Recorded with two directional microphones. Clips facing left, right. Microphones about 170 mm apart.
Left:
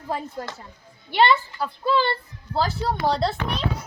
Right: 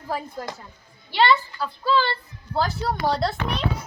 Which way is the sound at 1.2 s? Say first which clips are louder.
Left 1 dB; 20° left (ahead or behind).